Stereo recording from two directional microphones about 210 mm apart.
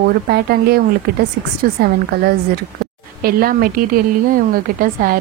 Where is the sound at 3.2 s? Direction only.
45° right (ahead or behind).